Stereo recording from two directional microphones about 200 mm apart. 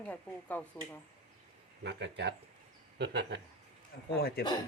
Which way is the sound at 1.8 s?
60° right (ahead or behind).